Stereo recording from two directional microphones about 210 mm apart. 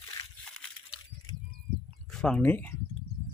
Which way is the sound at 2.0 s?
5° left (ahead or behind).